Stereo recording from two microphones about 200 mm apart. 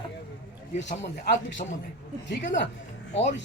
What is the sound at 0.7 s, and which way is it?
Speech, 60° left (ahead or behind).